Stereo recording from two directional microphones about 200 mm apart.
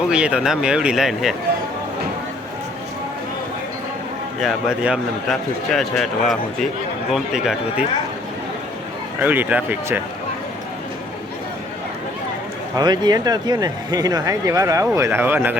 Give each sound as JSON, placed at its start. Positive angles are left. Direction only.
{"t": 0.1, "sound": "a man's voice", "side_deg": -5}
{"t": 4.4, "sound": "a man's voice", "side_deg": 0}
{"t": 9.2, "sound": "speech", "side_deg": -10}
{"t": 12.7, "sound": "speech", "side_deg": -20}